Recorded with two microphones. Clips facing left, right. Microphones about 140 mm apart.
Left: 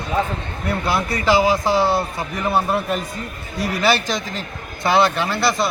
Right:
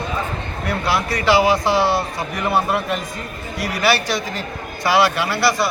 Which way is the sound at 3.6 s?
25° left (ahead or behind).